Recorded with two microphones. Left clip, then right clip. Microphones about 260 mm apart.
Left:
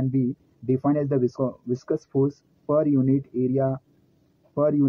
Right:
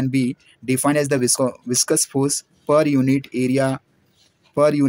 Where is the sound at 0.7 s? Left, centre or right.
Right.